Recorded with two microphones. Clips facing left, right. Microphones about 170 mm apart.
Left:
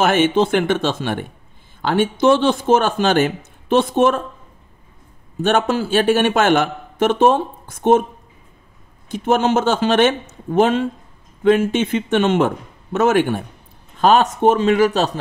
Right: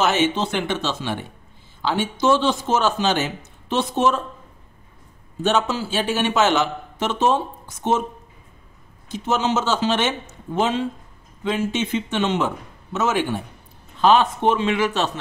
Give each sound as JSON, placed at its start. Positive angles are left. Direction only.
{"t": 0.0, "sound": "speech", "side_deg": 55}
{"t": 5.4, "sound": "speech", "side_deg": 55}
{"t": 9.1, "sound": "speech", "side_deg": 55}